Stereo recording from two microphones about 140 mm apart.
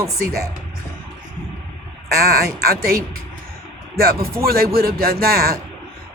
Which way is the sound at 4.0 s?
90° right.